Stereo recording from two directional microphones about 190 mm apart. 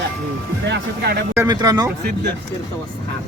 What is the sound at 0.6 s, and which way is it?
Speech, 60° right (ahead or behind).